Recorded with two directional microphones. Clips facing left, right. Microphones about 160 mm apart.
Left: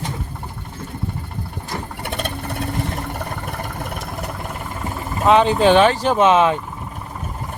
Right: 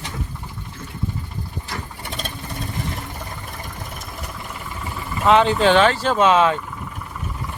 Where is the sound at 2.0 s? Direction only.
60° left (ahead or behind).